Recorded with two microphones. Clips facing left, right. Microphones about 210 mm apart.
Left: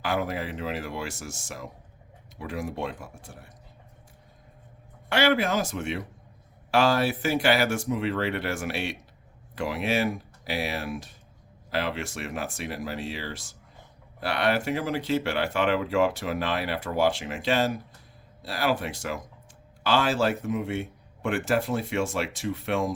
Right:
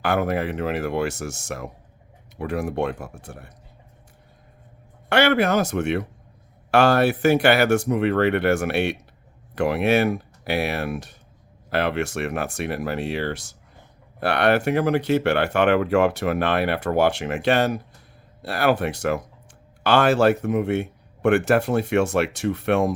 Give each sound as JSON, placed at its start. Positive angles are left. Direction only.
{"t": 0.0, "sound": "speech", "side_deg": -65}
{"t": 5.0, "sound": "speech", "side_deg": -65}